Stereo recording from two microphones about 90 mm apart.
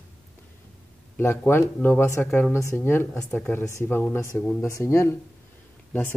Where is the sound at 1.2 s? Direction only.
25° left (ahead or behind).